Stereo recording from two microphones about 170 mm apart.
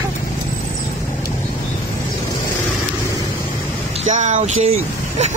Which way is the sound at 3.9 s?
45° right (ahead or behind).